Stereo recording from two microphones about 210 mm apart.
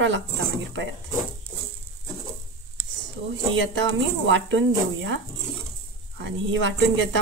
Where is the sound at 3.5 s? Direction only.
65° right (ahead or behind).